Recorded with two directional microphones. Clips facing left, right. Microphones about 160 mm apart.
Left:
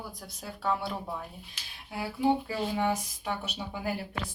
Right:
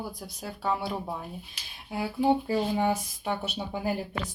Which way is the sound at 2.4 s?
30° right (ahead or behind).